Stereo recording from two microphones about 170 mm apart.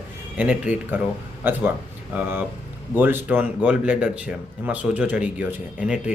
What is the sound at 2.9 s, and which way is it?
Speech, 10° right (ahead or behind).